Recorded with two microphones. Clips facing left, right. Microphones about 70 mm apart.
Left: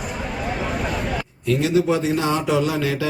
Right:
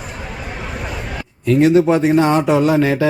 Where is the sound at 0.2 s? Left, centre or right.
Centre.